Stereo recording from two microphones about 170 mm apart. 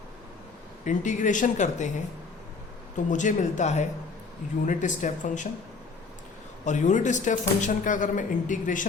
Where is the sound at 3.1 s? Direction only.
45° left (ahead or behind).